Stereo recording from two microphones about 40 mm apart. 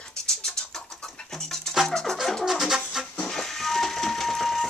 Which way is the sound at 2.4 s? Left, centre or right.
Centre.